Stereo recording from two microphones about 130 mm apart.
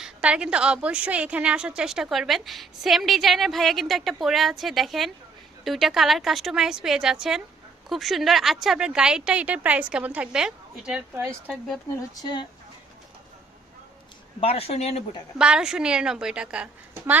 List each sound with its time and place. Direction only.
0.0 s a woman's voice: 10° right (ahead or behind)
11.2 s speech: 20° right (ahead or behind)
11.9 s speech: 30° left (ahead or behind)
14.4 s speech: 50° left (ahead or behind)
15.4 s a woman's voice: 5° right (ahead or behind)